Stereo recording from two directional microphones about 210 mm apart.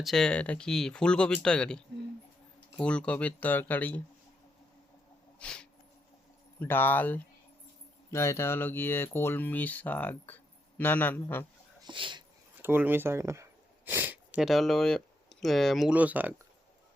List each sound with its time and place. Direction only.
0.0 s speech: centre (ahead or behind)
2.8 s speech: 5° left (ahead or behind)
5.4 s snort: 5° left (ahead or behind)
6.6 s speech: 10° left (ahead or behind)
11.8 s speech: 20° right (ahead or behind)
12.6 s speech: 10° right (ahead or behind)